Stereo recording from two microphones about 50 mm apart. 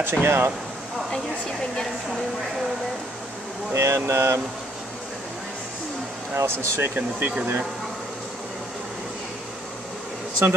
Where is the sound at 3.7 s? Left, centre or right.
Right.